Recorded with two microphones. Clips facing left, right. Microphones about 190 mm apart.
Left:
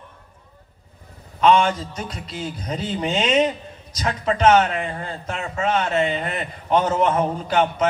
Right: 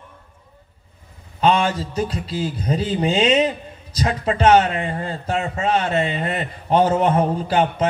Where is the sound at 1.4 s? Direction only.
30° right (ahead or behind).